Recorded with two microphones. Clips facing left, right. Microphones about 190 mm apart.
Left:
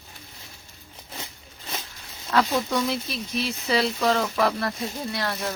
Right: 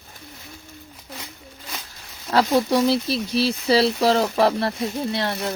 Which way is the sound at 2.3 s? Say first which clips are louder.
Right 5 dB; 35° right (ahead or behind).